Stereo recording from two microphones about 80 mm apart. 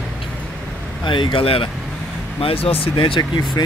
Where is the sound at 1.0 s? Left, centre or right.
Left.